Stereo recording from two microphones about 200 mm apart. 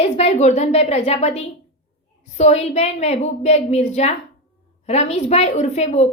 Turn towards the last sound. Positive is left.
turn(degrees=35)  # may be behind; listen again after turning